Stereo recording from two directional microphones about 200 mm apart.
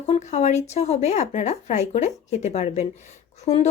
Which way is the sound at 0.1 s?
35° left (ahead or behind).